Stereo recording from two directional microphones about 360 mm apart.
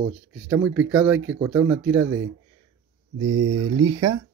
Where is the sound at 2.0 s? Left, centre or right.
Right.